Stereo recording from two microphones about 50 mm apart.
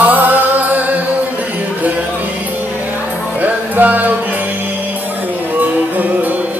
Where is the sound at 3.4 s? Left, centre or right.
Right.